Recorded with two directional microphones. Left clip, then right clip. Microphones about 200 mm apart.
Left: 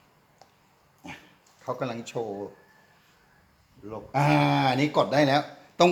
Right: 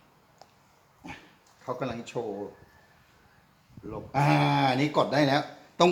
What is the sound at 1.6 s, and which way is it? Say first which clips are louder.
Speech: left 2 dB; 45° left (ahead or behind).